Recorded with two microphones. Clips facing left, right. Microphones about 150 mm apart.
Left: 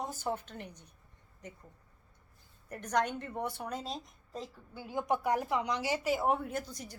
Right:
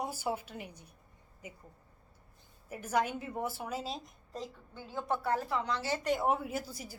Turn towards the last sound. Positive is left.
turn(degrees=-5)  # may be behind; listen again after turning